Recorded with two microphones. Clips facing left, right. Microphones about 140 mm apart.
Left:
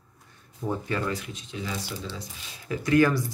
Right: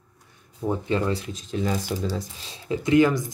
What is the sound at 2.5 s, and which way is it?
Speech, 25° right (ahead or behind).